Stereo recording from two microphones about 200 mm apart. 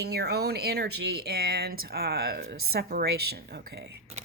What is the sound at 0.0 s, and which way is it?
Speech, 55° right (ahead or behind).